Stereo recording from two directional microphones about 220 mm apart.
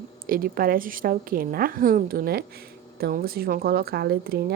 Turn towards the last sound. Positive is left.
turn(degrees=-45)  # may be behind; listen again after turning